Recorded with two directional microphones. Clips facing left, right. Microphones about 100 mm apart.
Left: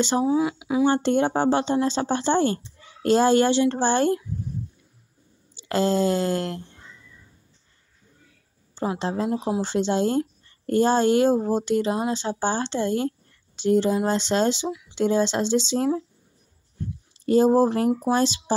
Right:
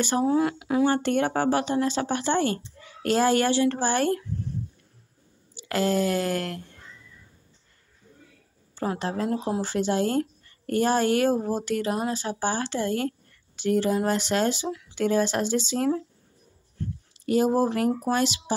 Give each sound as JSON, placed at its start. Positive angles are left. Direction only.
{"t": 0.2, "sound": "speech", "side_deg": 5}
{"t": 0.8, "sound": "speech", "side_deg": 25}
{"t": 5.6, "sound": "speech", "side_deg": 25}
{"t": 8.7, "sound": "speech", "side_deg": 25}
{"t": 17.3, "sound": "speech", "side_deg": 30}